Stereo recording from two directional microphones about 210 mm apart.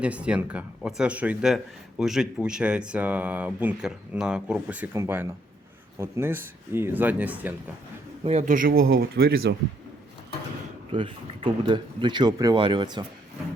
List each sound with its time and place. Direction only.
0.0 s speech: 5° right (ahead or behind)
8.2 s speech: 30° right (ahead or behind); by 9.6 s 45° right (ahead or behind)
10.9 s speech: 25° right (ahead or behind)